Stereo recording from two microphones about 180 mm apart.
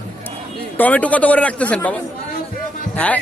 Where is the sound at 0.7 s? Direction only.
10° left (ahead or behind).